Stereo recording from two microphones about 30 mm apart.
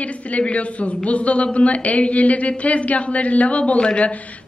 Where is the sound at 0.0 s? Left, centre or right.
Left.